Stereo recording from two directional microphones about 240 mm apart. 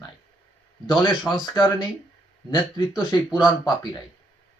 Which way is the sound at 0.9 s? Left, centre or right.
Centre.